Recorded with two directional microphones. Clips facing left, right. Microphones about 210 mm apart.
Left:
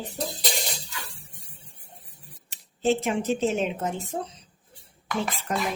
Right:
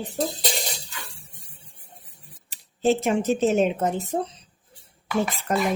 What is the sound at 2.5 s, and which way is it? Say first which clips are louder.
A woman's voice: right 2 dB; 40° right (ahead or behind).